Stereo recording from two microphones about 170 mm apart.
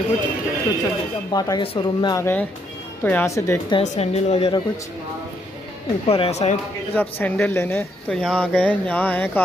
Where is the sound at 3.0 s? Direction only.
10° left (ahead or behind).